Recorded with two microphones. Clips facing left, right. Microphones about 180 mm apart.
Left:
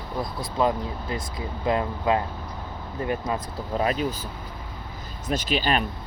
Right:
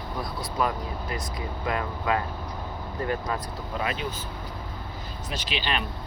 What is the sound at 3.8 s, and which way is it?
Speech, 40° left (ahead or behind).